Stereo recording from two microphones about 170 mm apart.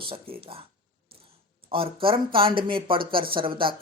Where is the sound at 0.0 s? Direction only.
30° right (ahead or behind).